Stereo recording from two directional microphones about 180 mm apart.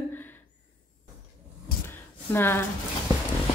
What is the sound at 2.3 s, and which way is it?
Speech, 10° left (ahead or behind).